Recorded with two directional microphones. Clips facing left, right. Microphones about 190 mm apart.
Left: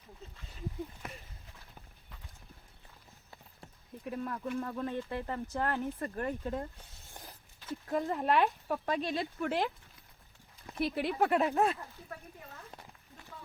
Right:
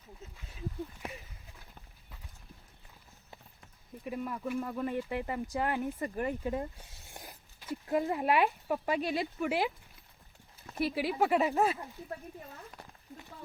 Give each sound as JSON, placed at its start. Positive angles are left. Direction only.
{"t": 4.0, "sound": "speech", "side_deg": -5}
{"t": 10.8, "sound": "speech", "side_deg": -5}
{"t": 12.7, "sound": "a sound", "side_deg": 30}